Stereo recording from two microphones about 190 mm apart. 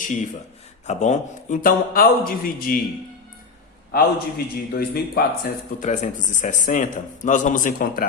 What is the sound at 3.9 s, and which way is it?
Speech, 50° left (ahead or behind).